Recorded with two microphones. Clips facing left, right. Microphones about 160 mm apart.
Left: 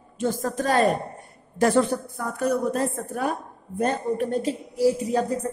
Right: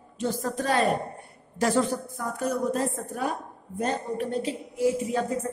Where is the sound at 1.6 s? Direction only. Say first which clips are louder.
Left 4 dB; 60° left (ahead or behind); by 5.6 s 35° left (ahead or behind).